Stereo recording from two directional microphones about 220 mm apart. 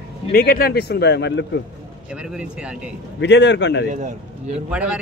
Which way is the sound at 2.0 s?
5° right (ahead or behind).